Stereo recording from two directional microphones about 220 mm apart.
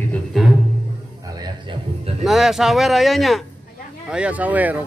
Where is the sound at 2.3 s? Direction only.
Centre (ahead or behind).